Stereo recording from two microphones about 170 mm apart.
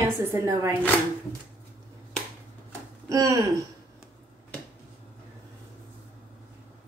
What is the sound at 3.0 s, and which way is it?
Speech, 20° right (ahead or behind).